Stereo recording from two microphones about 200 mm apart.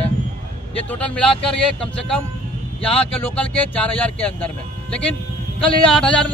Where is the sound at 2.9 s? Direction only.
5° left (ahead or behind).